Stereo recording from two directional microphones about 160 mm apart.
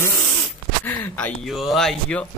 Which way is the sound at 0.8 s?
10° left (ahead or behind).